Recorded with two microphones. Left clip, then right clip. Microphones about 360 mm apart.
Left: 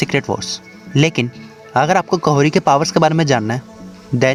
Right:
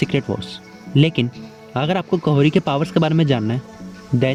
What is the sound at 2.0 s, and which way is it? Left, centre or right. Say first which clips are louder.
Speech: left 4 dB; left.